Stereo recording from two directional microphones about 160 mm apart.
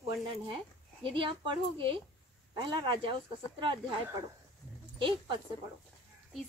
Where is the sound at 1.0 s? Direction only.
30° right (ahead or behind).